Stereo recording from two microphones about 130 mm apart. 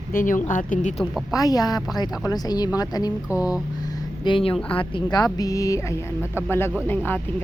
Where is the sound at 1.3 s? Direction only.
30° left (ahead or behind).